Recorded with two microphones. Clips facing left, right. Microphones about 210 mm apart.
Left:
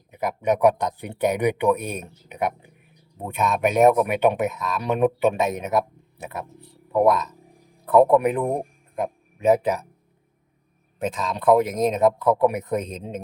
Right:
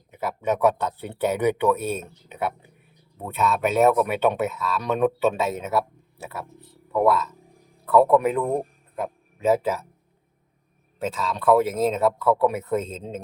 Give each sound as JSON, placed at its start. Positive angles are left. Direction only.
{"t": 0.1, "sound": "a man's voice", "side_deg": 15}
{"t": 11.0, "sound": "speech", "side_deg": 15}